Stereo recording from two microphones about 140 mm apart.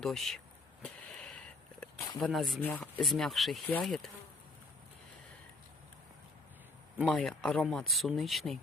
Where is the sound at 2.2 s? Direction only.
Centre (ahead or behind).